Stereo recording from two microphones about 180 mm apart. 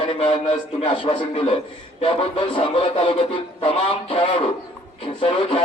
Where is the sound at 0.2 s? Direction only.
30° left (ahead or behind).